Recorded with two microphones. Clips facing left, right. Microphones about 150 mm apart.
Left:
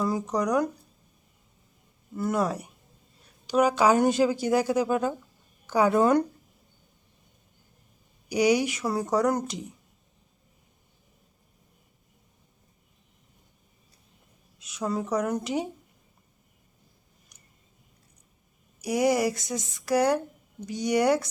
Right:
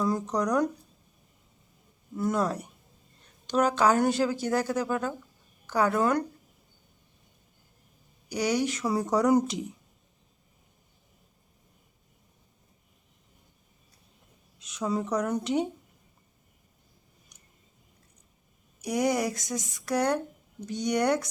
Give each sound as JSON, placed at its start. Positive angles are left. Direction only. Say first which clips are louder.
{"t": 0.0, "sound": "speech", "louder": "left 1 dB", "side_deg": 5}
{"t": 2.1, "sound": "a woman's voice", "louder": "left 1 dB", "side_deg": 5}
{"t": 8.3, "sound": "speech", "louder": "left 4 dB", "side_deg": 15}
{"t": 14.6, "sound": "speech", "louder": "even", "side_deg": 5}
{"t": 18.8, "sound": "speech", "louder": "left 3 dB", "side_deg": 5}